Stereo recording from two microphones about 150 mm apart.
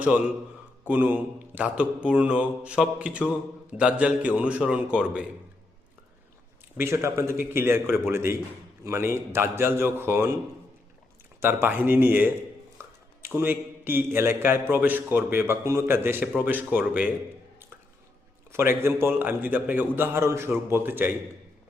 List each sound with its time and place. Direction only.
0.0 s mantra: 10° right (ahead or behind)
6.7 s mantra: 20° right (ahead or behind)
11.3 s mantra: 15° right (ahead or behind)
18.5 s mantra: 15° right (ahead or behind)